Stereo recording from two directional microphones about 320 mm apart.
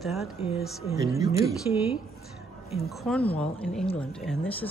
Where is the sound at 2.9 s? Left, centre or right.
Centre.